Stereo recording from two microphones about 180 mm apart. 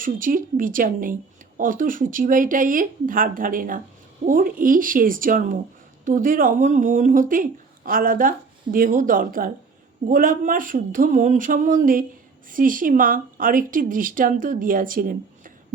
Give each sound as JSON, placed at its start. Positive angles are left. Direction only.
{"t": 0.0, "sound": "speech", "side_deg": -50}